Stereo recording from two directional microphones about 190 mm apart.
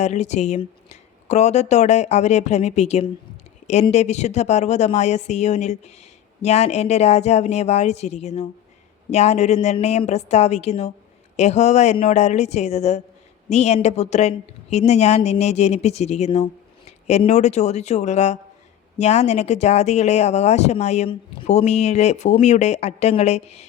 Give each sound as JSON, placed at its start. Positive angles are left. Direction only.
{"t": 0.0, "sound": "a woman's voice", "side_deg": 35}